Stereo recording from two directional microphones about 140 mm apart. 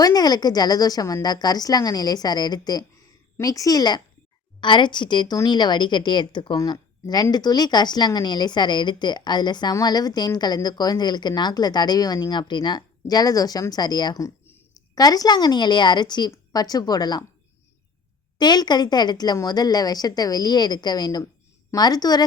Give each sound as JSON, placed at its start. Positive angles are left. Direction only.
{"t": 0.0, "sound": "a woman's voice", "side_deg": 30}
{"t": 18.3, "sound": "a woman's voice", "side_deg": 30}